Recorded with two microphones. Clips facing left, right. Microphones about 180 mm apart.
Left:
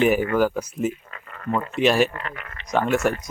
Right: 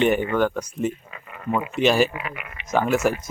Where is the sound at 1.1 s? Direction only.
10° right (ahead or behind).